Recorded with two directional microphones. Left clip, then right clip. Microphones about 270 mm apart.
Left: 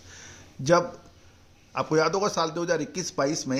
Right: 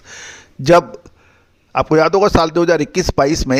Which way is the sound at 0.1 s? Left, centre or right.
Right.